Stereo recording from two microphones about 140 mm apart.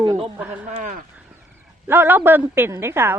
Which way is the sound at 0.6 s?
65° right (ahead or behind).